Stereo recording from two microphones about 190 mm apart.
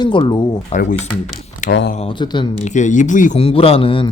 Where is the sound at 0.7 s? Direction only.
45° left (ahead or behind).